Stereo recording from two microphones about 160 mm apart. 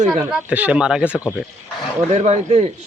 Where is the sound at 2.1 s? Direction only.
45° right (ahead or behind).